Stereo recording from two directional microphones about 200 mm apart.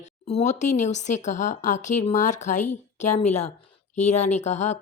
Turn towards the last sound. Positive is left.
turn(degrees=35)  # may be behind; listen again after turning